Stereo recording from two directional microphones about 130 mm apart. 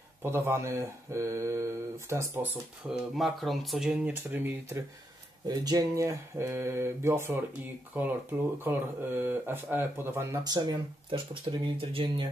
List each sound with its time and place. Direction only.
0.2 s mantra: 20° right (ahead or behind)
2.9 s speech: centre (ahead or behind); by 4.8 s 20° right (ahead or behind)
5.5 s mantra: 30° right (ahead or behind); by 8.1 s 15° right (ahead or behind)
8.6 s speech: 15° right (ahead or behind)
10.4 s speech: 35° right (ahead or behind)